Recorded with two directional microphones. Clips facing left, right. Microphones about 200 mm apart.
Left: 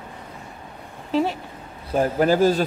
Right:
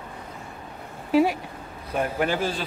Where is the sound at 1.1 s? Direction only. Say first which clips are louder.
Right 2 dB; 10° right (ahead or behind).